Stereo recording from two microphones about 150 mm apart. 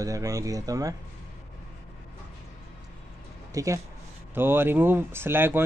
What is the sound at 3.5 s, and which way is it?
Speech, 20° right (ahead or behind).